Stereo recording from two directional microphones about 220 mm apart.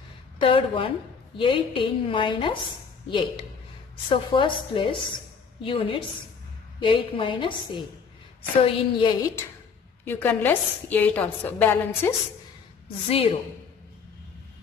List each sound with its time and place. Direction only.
0.4 s a woman's voice: 25° left (ahead or behind)
10.0 s a woman's voice: 10° left (ahead or behind)
12.8 s a woman's voice: 25° left (ahead or behind)